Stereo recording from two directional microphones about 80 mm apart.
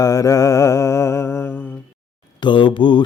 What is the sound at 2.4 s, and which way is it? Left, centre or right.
Speech, left.